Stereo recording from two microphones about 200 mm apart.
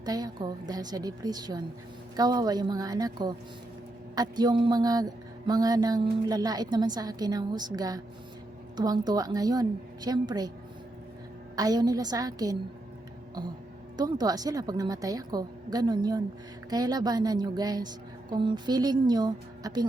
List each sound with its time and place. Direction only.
0.0 s speech: 20° right (ahead or behind)
11.5 s speech: 20° right (ahead or behind)
13.9 s speech: 20° right (ahead or behind)